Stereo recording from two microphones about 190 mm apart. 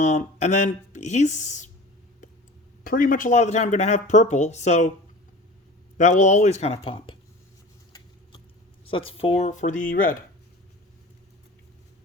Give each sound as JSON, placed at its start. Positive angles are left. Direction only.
{"t": 0.0, "sound": "speech", "side_deg": 40}
{"t": 2.8, "sound": "speech", "side_deg": 45}
{"t": 6.0, "sound": "speech", "side_deg": 40}
{"t": 8.9, "sound": "speech", "side_deg": 30}